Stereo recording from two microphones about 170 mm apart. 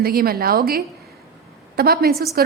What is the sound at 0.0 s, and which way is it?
A woman's voice, 60° right (ahead or behind).